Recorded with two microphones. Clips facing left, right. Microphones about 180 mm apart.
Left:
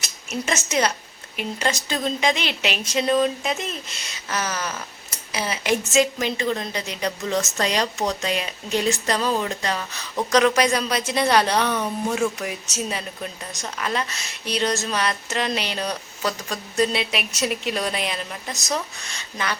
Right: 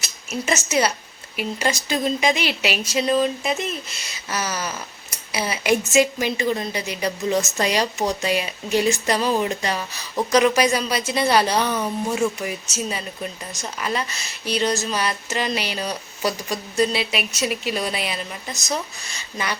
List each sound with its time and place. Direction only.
0.0 s a woman's voice: 5° right (ahead or behind)